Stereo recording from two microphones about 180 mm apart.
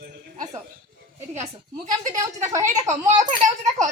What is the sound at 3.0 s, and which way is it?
Speech, 45° right (ahead or behind).